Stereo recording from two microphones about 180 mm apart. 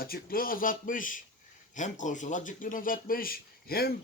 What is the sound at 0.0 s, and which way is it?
A man's voice, 55° left (ahead or behind).